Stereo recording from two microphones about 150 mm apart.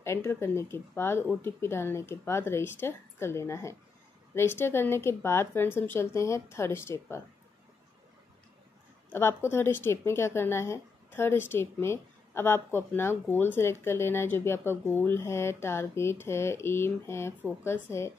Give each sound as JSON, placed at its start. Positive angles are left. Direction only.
{"t": 0.0, "sound": "a woman's voice", "side_deg": 20}
{"t": 9.1, "sound": "a woman's voice", "side_deg": 15}